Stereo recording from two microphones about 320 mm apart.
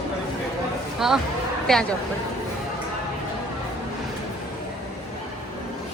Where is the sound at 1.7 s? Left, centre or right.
Centre.